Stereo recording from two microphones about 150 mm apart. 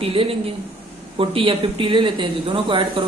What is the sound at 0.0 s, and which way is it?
Speech, 35° right (ahead or behind).